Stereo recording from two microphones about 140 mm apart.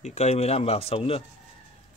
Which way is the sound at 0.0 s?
55° left (ahead or behind).